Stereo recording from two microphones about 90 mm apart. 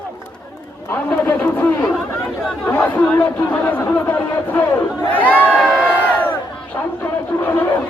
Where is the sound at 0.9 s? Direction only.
20° left (ahead or behind).